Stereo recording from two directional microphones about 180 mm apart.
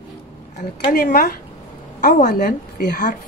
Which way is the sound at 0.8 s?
50° left (ahead or behind).